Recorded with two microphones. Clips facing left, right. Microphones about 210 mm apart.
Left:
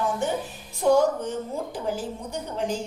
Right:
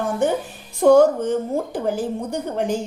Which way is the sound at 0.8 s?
60° right (ahead or behind).